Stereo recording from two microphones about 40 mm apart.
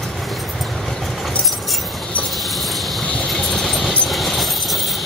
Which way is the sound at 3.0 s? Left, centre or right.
Left.